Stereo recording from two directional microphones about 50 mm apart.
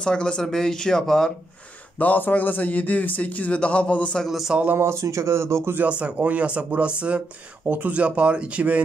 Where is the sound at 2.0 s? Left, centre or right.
Left.